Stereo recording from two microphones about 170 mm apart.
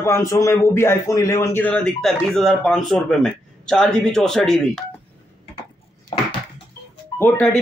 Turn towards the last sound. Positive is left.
turn(degrees=10)  # may be behind; listen again after turning